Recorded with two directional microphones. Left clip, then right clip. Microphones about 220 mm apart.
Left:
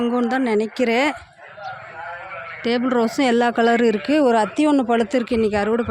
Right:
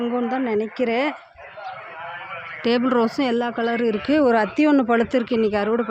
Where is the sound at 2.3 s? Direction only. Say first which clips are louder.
Left 1 dB; 45° right (ahead or behind).